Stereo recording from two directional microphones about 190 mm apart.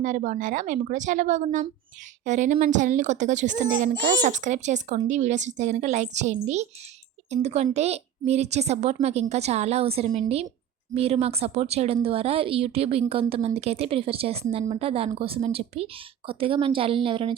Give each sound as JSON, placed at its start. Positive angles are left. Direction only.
{"t": 0.0, "sound": "a woman's voice", "side_deg": -40}